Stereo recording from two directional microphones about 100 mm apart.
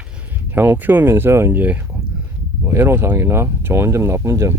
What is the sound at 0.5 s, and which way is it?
Speech, 20° right (ahead or behind).